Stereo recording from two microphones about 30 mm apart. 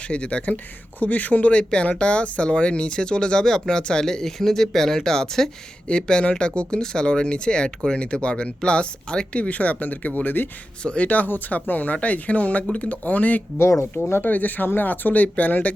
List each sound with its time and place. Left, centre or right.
0.1 s speech: left
0.4 s speech: left
1.5 s speech: left
4.0 s speech: centre
6.0 s speech: left
9.3 s speech: left
10.8 s speech: left
11.1 s speech: left
14.2 s speech: left